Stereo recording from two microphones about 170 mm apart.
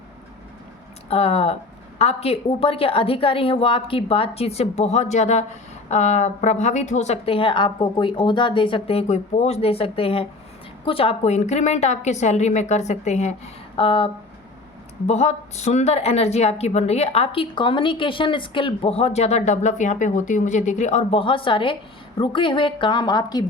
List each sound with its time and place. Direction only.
1.1 s a woman's voice: 35° left (ahead or behind)
13.7 s a woman's voice: 30° left (ahead or behind)